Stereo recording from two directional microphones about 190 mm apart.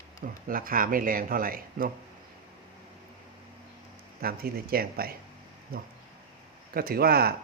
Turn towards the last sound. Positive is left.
turn(degrees=-55)  # may be behind; listen again after turning